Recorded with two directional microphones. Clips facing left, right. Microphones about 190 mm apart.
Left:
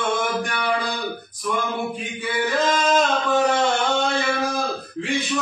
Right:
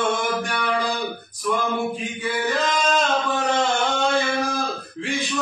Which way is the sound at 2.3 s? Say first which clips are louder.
Left 2 dB; centre (ahead or behind).